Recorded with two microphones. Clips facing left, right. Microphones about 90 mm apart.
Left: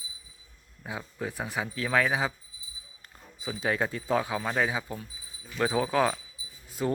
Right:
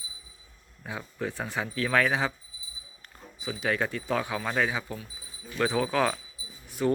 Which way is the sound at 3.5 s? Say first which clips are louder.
Even; 25° left (ahead or behind).